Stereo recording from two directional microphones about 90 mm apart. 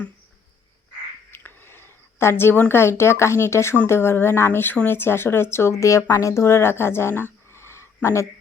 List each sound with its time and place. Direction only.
1.3 s a woman's voice: 25° left (ahead or behind)
7.1 s speech: 25° right (ahead or behind)
7.5 s a sound: 30° left (ahead or behind)